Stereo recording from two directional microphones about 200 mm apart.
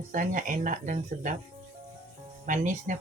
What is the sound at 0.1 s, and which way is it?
Speech, 40° right (ahead or behind).